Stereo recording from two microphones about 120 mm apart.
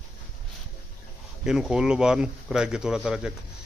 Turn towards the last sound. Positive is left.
turn(degrees=-5)  # may be behind; listen again after turning